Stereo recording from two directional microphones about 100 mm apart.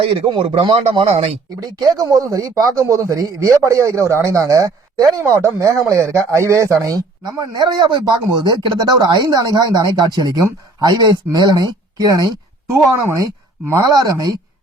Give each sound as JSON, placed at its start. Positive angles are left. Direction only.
{"t": 0.0, "sound": "speech", "side_deg": -65}
{"t": 1.5, "sound": "speech", "side_deg": -40}